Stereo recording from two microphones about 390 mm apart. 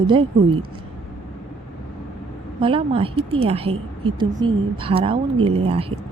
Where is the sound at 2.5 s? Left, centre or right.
Centre.